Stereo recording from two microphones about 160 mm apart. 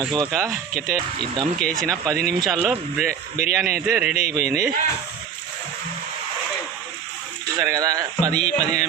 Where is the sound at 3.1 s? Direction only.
65° right (ahead or behind).